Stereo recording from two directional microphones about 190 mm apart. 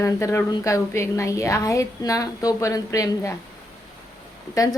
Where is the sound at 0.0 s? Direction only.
15° left (ahead or behind).